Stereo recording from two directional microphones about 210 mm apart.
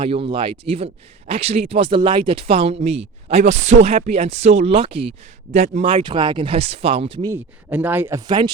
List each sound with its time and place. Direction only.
0.0 s speech: 25° right (ahead or behind)
7.3 s speech: 10° right (ahead or behind)